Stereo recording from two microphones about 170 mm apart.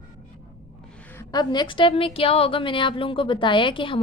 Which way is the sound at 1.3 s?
25° left (ahead or behind).